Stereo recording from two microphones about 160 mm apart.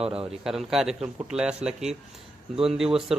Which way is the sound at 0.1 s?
5° right (ahead or behind).